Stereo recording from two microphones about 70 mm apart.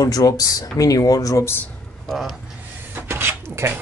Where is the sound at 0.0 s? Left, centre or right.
Left.